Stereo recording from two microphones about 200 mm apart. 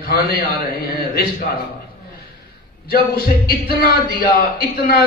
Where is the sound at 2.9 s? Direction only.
50° left (ahead or behind).